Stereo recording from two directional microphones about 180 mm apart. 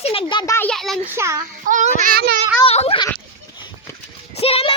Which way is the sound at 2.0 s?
55° right (ahead or behind).